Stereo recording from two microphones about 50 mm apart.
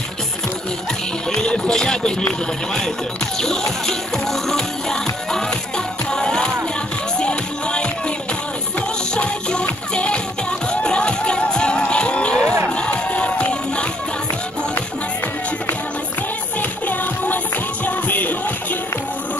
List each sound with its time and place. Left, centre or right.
1.3 s music: centre
9.1 s music: centre
16.8 s music: left